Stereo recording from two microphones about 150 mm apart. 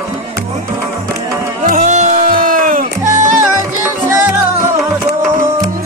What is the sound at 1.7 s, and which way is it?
Music, 55° right (ahead or behind).